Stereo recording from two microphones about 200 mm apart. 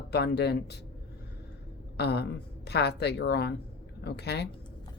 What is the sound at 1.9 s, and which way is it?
Speech, 55° left (ahead or behind).